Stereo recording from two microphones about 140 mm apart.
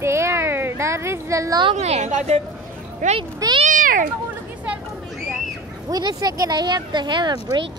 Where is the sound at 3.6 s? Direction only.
75° right (ahead or behind).